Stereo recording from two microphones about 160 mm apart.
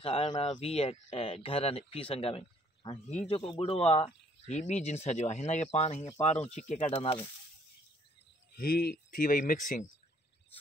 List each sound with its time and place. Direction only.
0.0 s speech: 40° left (ahead or behind)
8.5 s speech: 70° left (ahead or behind); by 9.8 s 55° left (ahead or behind)